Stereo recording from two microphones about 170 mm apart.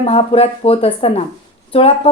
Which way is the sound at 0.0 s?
35° left (ahead or behind).